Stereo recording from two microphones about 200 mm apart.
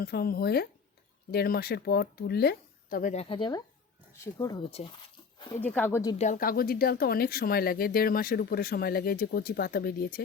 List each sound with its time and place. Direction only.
0.0 s speech: 50° left (ahead or behind); by 4.9 s 25° left (ahead or behind)
5.5 s speech: 10° left (ahead or behind)
6.1 s speech: 40° left (ahead or behind)